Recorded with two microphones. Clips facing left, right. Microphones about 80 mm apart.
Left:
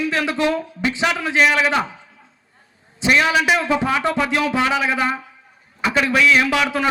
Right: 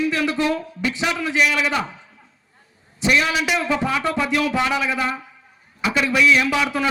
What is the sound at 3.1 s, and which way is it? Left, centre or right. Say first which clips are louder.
A man's voice: left 4 dB; left.